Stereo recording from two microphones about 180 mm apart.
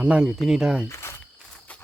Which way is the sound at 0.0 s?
5° right (ahead or behind).